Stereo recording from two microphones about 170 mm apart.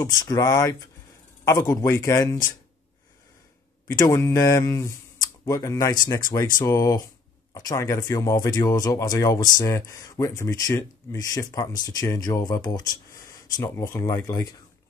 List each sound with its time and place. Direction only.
0.0 s speech: 20° left (ahead or behind)
3.8 s speech: 15° left (ahead or behind)